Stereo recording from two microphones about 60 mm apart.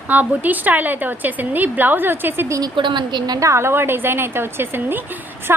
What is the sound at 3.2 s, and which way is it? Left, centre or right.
Speech, right.